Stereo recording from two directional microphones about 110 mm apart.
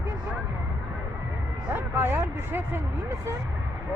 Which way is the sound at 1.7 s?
20° right (ahead or behind).